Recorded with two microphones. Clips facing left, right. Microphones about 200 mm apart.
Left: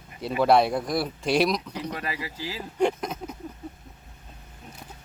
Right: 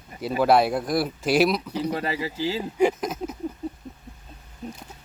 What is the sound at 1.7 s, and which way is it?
Speech, 30° right (ahead or behind).